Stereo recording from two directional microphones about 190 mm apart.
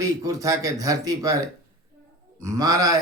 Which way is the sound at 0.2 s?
20° right (ahead or behind).